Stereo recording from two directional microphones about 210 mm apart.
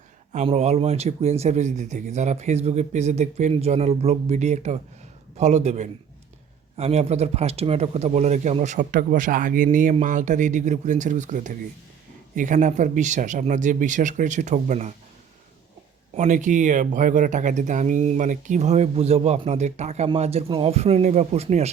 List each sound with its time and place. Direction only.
0.3 s speech: 30° right (ahead or behind)
16.1 s speech: 35° right (ahead or behind)